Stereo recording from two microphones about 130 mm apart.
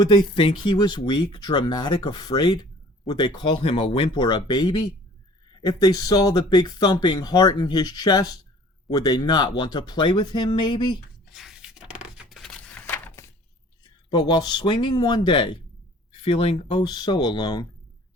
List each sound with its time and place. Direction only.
0.0 s speech: 35° left (ahead or behind)
11.3 s a sound: 5° right (ahead or behind); by 13.3 s 20° left (ahead or behind)
14.1 s speech: 35° left (ahead or behind)